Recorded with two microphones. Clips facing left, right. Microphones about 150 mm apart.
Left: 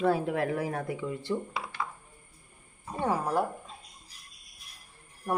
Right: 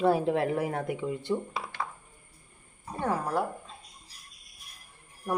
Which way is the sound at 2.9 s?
10° left (ahead or behind).